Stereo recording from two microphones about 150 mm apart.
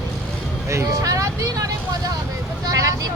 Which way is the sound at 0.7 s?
20° right (ahead or behind).